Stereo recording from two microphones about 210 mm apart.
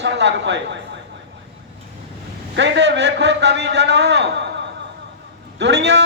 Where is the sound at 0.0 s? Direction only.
55° right (ahead or behind).